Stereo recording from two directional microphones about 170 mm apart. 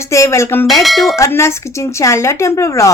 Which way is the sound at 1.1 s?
15° left (ahead or behind).